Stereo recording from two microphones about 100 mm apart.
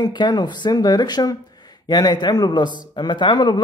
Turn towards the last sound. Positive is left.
turn(degrees=45)  # may be behind; listen again after turning